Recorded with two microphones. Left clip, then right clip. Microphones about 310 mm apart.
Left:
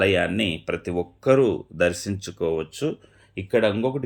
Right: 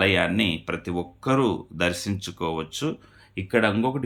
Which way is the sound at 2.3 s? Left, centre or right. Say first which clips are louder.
Left 4 dB; right.